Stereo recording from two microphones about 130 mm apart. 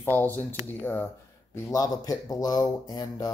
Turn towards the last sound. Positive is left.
turn(degrees=30)  # may be behind; listen again after turning